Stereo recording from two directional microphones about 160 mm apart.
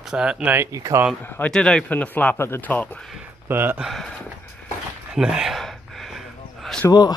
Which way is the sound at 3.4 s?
15° right (ahead or behind).